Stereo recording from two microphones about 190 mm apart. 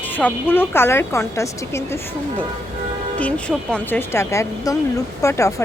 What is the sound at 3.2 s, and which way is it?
Speech, 5° left (ahead or behind).